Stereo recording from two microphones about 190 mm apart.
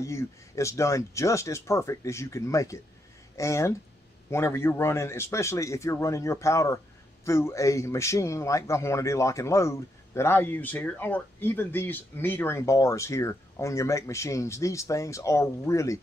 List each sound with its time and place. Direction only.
0.0 s a man's voice: 15° left (ahead or behind)